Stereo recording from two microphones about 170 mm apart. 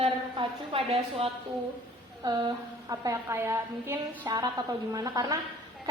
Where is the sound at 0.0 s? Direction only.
35° right (ahead or behind).